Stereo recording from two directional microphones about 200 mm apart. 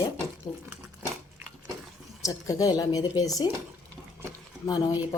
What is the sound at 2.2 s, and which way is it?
Speech, 15° left (ahead or behind).